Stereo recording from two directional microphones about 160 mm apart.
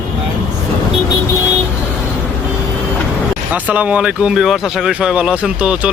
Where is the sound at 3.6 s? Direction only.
10° right (ahead or behind).